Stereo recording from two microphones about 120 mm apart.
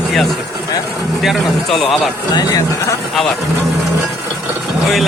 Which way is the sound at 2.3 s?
35° left (ahead or behind).